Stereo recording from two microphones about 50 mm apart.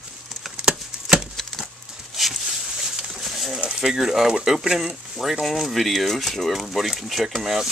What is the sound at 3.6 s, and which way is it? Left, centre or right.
Speech, centre.